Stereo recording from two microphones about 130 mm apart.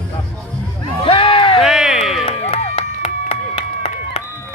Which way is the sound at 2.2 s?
55° left (ahead or behind).